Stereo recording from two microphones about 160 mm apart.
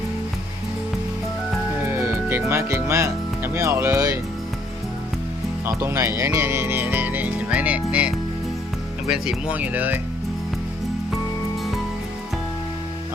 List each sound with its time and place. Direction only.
1.8 s speech: 15° right (ahead or behind)
5.6 s speech: 15° right (ahead or behind)